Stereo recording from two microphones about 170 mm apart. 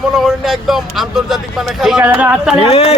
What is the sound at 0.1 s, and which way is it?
Speech, centre (ahead or behind).